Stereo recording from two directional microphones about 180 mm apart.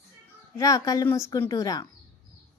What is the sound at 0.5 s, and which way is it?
A woman's voice, 20° left (ahead or behind).